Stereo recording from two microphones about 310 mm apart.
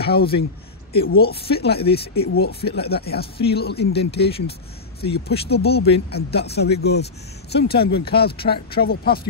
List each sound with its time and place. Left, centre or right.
0.0 s speech: left